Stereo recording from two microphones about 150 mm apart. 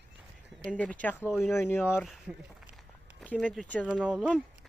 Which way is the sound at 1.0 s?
15° left (ahead or behind).